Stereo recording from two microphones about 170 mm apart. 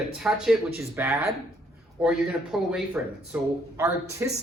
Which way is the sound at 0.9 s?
15° right (ahead or behind).